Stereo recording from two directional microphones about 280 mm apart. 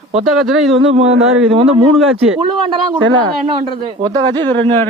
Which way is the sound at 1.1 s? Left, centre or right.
Right.